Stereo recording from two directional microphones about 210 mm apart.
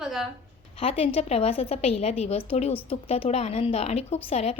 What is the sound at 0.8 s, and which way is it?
A woman's voice, 30° left (ahead or behind).